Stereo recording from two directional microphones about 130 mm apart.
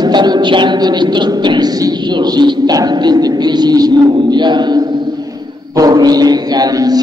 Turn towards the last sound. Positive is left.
turn(degrees=-30)  # may be behind; listen again after turning